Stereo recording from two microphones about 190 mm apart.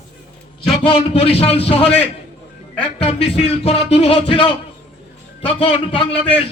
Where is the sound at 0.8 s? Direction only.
30° left (ahead or behind).